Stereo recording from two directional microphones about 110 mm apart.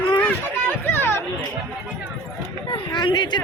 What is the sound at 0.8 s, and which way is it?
Speech, 20° left (ahead or behind).